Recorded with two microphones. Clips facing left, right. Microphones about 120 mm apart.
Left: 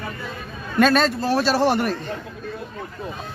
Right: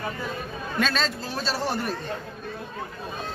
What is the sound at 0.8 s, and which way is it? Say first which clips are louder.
A man's voice: left 10 dB; 55° left (ahead or behind).